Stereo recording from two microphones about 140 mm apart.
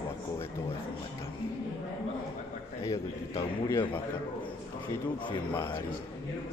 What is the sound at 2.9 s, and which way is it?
Speech, 20° left (ahead or behind).